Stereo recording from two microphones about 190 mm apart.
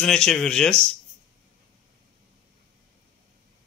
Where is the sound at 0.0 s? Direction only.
5° left (ahead or behind).